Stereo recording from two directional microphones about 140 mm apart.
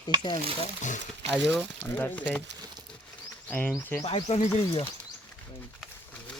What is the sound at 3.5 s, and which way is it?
Speech, 10° left (ahead or behind).